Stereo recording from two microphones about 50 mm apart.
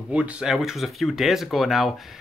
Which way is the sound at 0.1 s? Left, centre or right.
Right.